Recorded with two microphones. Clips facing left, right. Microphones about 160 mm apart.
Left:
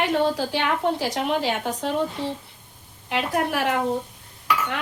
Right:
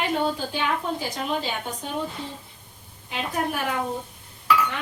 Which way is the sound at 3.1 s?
75° left (ahead or behind).